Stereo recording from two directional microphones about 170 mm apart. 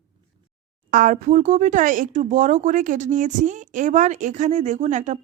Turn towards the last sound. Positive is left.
turn(degrees=-45)  # may be behind; listen again after turning